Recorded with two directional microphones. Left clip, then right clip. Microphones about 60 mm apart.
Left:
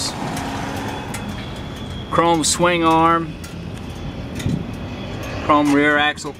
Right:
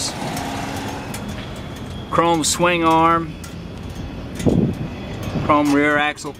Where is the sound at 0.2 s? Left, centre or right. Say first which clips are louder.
Even; right.